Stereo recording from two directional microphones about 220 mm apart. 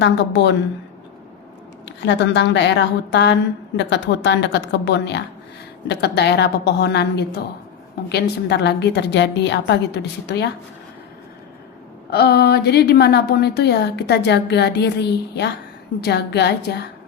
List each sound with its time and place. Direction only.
0.0 s a woman's voice: 50° left (ahead or behind)
1.8 s a woman's voice: 50° left (ahead or behind)
12.1 s a woman's voice: 45° left (ahead or behind)